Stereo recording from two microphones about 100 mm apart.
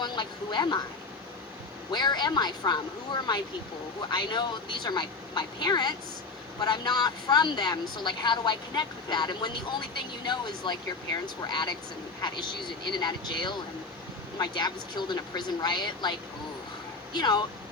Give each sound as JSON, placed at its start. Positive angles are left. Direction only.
{"t": 0.0, "sound": "vehicle", "side_deg": 50}
{"t": 1.9, "sound": "speech", "side_deg": 45}
{"t": 17.2, "sound": "speech", "side_deg": 45}